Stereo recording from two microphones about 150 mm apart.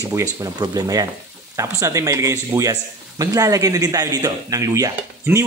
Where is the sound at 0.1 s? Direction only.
20° right (ahead or behind).